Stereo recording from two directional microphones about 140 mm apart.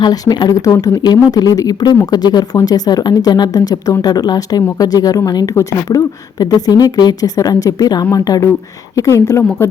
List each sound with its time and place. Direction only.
0.0 s a woman's voice: 30° left (ahead or behind)